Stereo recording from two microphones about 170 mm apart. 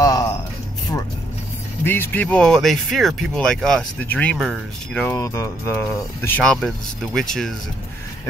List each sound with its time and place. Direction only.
0.0 s music: 20° left (ahead or behind)
1.9 s speech: 10° left (ahead or behind)
4.9 s speech: 15° left (ahead or behind)